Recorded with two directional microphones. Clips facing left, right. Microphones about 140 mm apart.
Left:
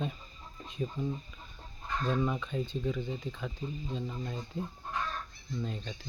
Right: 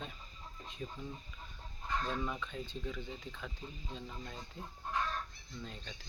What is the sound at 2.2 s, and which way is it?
Speech, 15° left (ahead or behind).